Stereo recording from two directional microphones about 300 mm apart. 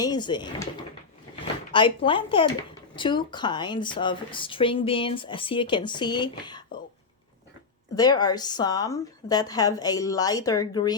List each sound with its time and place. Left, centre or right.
0.0 s speech: centre
1.7 s speech: centre
7.9 s speech: centre